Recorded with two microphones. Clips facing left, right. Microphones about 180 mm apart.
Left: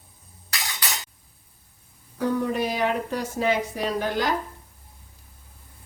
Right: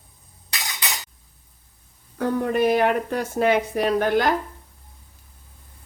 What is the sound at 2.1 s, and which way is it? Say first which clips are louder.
Speech: right 2 dB; 60° right (ahead or behind).